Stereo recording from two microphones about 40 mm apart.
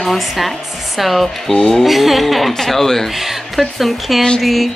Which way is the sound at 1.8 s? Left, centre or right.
Centre.